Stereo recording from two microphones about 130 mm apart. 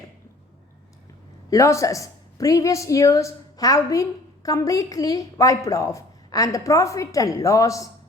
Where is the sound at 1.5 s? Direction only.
25° left (ahead or behind).